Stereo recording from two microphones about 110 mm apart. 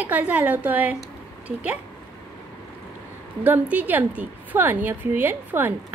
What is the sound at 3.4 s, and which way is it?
A woman's voice, 15° right (ahead or behind).